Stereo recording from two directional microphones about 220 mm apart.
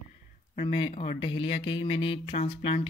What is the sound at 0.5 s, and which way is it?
Speech, 25° left (ahead or behind).